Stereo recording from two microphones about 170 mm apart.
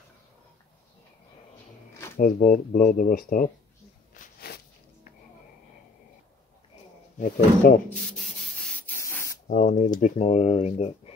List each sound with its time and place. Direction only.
2.1 s speech: 55° left (ahead or behind)
4.1 s a sound: 65° left (ahead or behind)
7.2 s speech: 55° left (ahead or behind)
8.2 s sanding: centre (ahead or behind)
9.0 s spray: 15° left (ahead or behind)
9.5 s speech: 50° left (ahead or behind)